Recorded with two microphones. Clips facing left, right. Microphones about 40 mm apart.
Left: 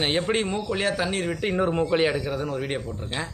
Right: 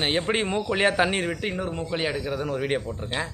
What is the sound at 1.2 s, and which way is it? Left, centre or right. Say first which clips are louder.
Speech: left 1 dB; centre.